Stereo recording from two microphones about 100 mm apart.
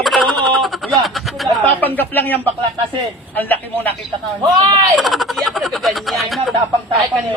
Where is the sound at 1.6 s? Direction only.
15° left (ahead or behind).